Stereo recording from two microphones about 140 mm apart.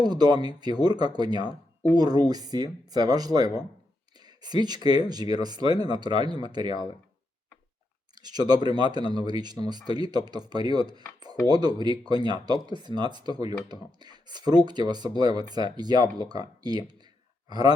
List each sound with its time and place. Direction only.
0.0 s speech: 30° right (ahead or behind)
8.1 s speech: 30° right (ahead or behind)